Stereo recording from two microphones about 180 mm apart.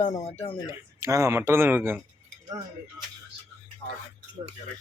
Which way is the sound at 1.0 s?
15° right (ahead or behind).